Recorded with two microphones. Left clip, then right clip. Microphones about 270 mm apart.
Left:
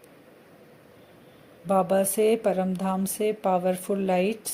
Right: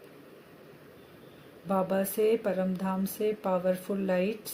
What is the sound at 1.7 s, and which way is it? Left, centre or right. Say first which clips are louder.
Speech: left 6 dB; left.